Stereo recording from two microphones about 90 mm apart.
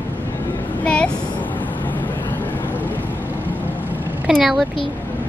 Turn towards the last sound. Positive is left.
turn(degrees=0)  # may be behind; listen again after turning